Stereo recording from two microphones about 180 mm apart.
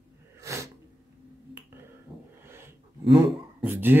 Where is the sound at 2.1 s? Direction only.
Centre (ahead or behind).